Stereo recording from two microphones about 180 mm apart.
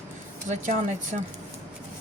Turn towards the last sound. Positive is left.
turn(degrees=-45)  # may be behind; listen again after turning